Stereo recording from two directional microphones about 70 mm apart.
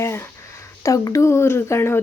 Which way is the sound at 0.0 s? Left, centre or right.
Left.